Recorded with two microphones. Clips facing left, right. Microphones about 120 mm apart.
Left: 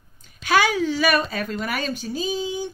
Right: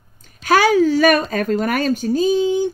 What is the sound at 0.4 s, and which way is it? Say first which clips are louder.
A woman's voice: right 6 dB; 45° right (ahead or behind).